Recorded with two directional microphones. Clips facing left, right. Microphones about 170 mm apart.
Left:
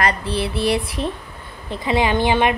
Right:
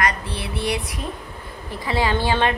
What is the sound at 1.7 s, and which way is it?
Speech, 20° left (ahead or behind).